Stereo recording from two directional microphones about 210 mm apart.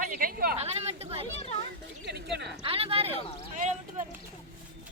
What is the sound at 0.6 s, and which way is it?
Speech, 30° right (ahead or behind).